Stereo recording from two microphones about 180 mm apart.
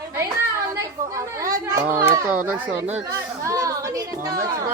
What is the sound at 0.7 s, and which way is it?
Chatter, 15° right (ahead or behind).